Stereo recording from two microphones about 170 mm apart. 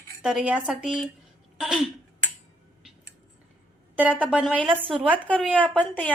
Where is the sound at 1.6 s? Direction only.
5° right (ahead or behind).